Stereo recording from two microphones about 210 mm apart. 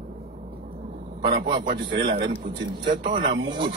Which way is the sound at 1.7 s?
50° right (ahead or behind).